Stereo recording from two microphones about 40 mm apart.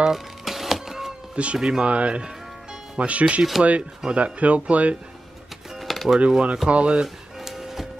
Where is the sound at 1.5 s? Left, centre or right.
Centre.